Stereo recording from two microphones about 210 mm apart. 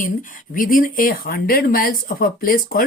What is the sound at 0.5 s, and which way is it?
Speech, 40° left (ahead or behind).